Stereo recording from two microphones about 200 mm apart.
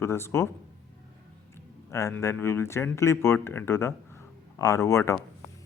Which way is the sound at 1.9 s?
15° left (ahead or behind).